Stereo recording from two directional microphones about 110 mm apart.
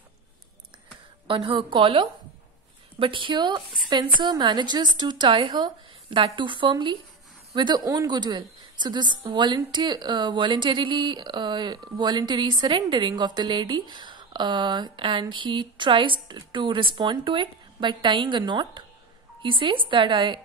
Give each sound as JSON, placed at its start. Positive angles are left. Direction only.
{"t": 1.2, "sound": "a woman's voice", "side_deg": -55}